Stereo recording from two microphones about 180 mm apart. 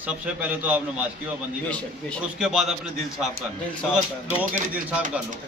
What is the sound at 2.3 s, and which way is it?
Speech, 5° right (ahead or behind).